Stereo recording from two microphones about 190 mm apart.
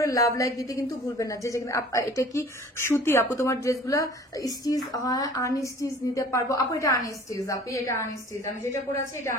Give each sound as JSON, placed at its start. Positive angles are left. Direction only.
{"t": 0.0, "sound": "a woman's voice", "side_deg": 15}